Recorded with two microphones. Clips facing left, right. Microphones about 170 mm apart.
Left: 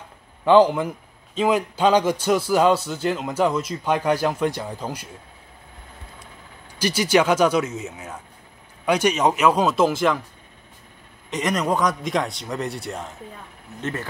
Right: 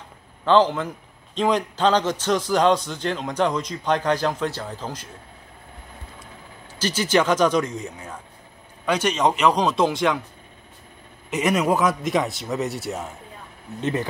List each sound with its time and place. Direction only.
0.5 s a man's voice: 10° left (ahead or behind)
6.8 s a man's voice: 10° left (ahead or behind)
11.2 s a man's voice: 10° right (ahead or behind)
13.7 s speech: 20° right (ahead or behind)